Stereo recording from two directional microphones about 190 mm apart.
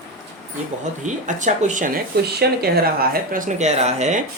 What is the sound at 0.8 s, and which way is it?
Speech, 40° right (ahead or behind).